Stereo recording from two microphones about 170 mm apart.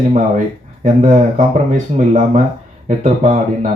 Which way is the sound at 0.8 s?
45° right (ahead or behind).